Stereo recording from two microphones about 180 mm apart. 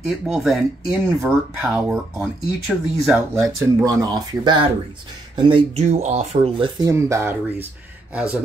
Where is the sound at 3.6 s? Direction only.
20° right (ahead or behind).